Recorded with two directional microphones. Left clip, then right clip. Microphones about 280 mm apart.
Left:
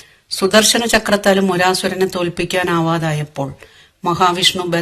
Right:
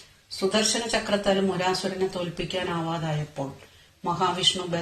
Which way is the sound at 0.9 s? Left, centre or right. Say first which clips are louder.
Left 11 dB; left.